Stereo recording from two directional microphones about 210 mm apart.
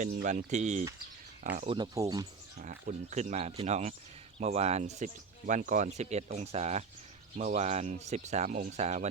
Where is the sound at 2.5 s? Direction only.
35° right (ahead or behind).